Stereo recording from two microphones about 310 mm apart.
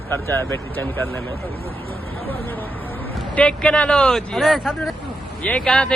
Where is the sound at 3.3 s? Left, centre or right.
Centre.